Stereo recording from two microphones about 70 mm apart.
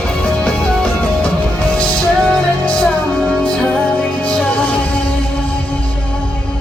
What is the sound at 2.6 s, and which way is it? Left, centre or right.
Music, centre.